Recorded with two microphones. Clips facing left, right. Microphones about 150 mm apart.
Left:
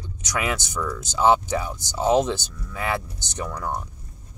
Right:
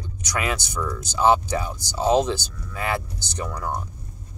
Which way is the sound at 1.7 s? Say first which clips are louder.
Even; 20° left (ahead or behind).